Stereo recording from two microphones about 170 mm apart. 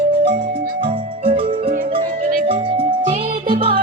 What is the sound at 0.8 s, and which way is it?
Music, 30° right (ahead or behind).